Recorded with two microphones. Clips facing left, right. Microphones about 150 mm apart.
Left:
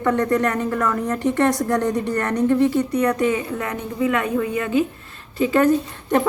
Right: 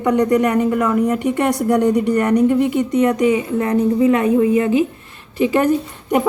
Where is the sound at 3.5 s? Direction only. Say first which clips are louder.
Right 9 dB; 30° right (ahead or behind).